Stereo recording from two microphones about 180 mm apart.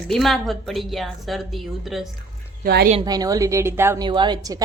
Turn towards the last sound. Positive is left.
turn(degrees=-20)  # may be behind; listen again after turning